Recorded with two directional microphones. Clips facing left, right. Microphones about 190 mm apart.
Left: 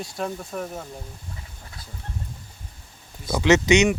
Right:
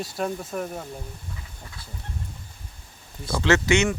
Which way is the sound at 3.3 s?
15° left (ahead or behind).